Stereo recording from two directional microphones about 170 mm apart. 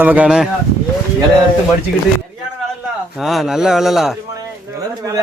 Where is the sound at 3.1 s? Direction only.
Centre (ahead or behind).